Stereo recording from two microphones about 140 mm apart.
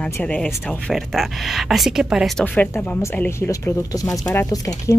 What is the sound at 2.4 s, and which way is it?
Speech, 10° left (ahead or behind).